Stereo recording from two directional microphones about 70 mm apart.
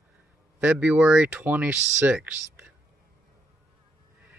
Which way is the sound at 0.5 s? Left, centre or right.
Centre.